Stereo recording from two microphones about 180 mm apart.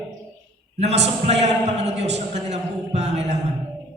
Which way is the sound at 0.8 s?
40° right (ahead or behind).